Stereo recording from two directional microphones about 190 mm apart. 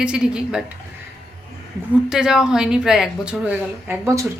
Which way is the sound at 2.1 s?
5° right (ahead or behind).